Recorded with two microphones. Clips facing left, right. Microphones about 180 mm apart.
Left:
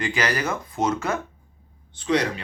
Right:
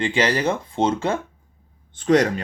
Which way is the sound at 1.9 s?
50° right (ahead or behind).